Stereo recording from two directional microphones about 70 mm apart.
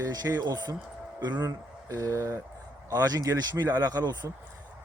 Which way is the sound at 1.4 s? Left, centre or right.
Right.